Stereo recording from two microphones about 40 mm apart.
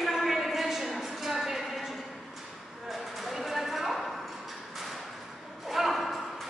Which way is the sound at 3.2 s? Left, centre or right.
Centre.